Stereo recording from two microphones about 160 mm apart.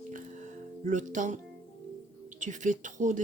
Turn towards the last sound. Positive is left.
turn(degrees=-50)  # may be behind; listen again after turning